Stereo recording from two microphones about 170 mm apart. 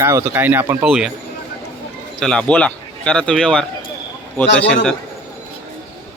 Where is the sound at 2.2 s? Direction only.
5° left (ahead or behind).